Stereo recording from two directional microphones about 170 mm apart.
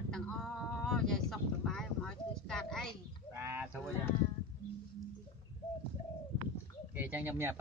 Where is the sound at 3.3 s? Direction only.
15° right (ahead or behind).